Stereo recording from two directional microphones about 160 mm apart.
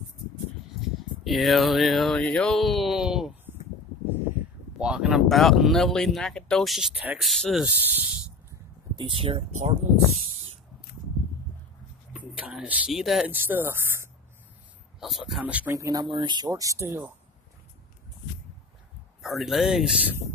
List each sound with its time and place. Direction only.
0.8 s a sound: centre (ahead or behind)
4.7 s speech: 5° right (ahead or behind)
8.9 s speech: 30° right (ahead or behind)
12.1 s speech: 5° right (ahead or behind)
15.0 s speech: centre (ahead or behind)
19.2 s speech: centre (ahead or behind)